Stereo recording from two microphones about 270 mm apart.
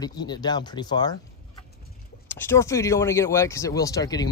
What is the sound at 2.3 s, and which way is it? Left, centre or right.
Speech, centre.